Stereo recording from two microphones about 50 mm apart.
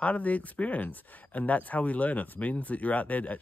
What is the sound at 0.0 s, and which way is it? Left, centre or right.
Speech, left.